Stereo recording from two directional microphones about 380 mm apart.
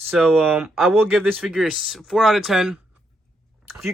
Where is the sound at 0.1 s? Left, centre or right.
Centre.